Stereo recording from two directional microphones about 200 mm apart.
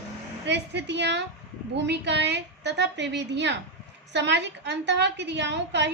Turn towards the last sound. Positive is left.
turn(degrees=-60)  # may be behind; listen again after turning